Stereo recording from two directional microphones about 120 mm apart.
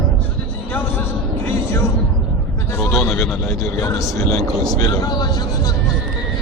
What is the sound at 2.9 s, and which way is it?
Speech, 25° left (ahead or behind).